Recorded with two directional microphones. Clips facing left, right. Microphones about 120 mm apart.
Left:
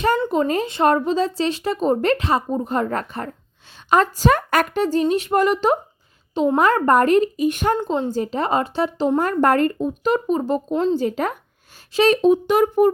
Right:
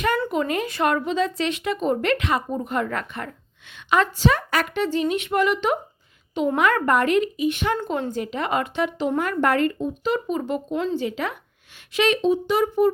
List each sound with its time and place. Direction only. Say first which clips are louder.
0.3 s speech: left 4 dB; 35° left (ahead or behind)
7.8 s speech: left 4 dB; 20° left (ahead or behind)
8.2 s speech: left 4 dB; 35° left (ahead or behind); by 12.9 s 50° left (ahead or behind)